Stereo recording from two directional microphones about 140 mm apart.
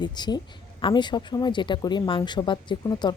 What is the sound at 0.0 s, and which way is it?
Speech, 30° left (ahead or behind).